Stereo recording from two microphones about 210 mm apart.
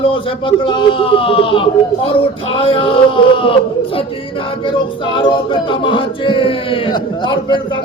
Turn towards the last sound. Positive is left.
turn(degrees=20)  # may be behind; listen again after turning